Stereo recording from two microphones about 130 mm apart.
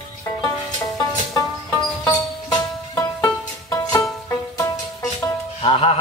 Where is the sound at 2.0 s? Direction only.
30° left (ahead or behind).